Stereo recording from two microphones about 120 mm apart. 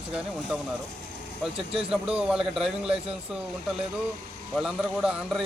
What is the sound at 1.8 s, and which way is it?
Speech, 10° right (ahead or behind).